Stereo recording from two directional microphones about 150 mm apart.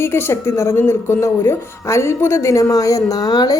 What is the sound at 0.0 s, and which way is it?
Speech, 15° left (ahead or behind).